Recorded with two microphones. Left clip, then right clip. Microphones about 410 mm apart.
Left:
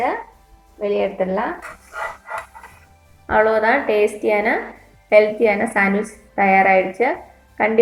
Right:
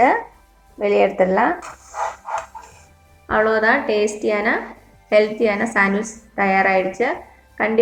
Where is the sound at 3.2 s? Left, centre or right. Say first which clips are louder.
Left 1 dB; centre.